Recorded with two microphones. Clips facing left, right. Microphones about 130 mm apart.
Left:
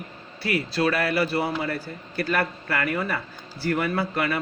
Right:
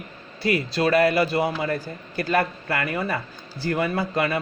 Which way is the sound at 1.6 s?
40° right (ahead or behind).